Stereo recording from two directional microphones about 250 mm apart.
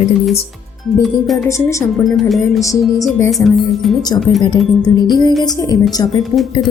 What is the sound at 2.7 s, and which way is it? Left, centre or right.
Speech, centre.